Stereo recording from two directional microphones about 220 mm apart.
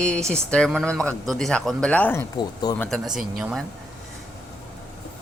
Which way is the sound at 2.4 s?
20° left (ahead or behind).